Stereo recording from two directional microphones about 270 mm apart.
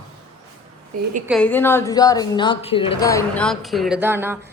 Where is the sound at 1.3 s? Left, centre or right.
Centre.